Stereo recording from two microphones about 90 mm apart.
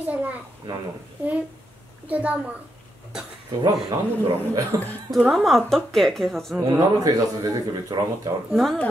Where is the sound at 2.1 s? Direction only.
15° right (ahead or behind).